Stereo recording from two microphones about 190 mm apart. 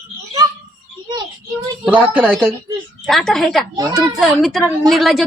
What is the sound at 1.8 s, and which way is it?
A woman's voice, 10° right (ahead or behind).